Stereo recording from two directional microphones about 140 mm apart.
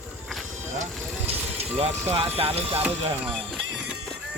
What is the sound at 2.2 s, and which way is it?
Speech, 45° right (ahead or behind).